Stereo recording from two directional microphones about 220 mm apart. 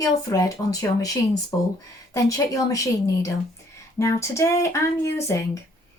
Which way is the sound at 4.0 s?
15° left (ahead or behind).